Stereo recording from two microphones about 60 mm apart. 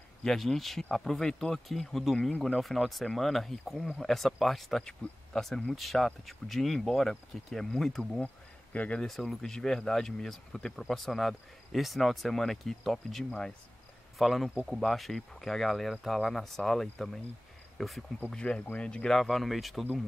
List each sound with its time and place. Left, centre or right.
0.2 s speech: centre
8.7 s speech: left
9.0 s speech: centre
18.3 s speech: centre
19.2 s speech: centre